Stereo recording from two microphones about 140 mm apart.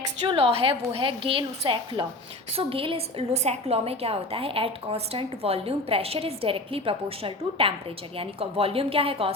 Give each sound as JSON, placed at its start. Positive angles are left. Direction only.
{"t": 0.3, "sound": "a woman's voice", "side_deg": -40}